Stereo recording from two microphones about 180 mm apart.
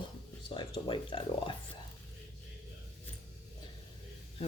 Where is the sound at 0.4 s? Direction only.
25° left (ahead or behind).